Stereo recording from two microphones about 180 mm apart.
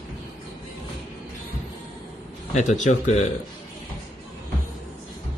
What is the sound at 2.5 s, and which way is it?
Speech, 40° left (ahead or behind).